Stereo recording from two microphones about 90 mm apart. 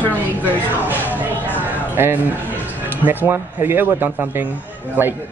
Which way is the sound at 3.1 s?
20° right (ahead or behind).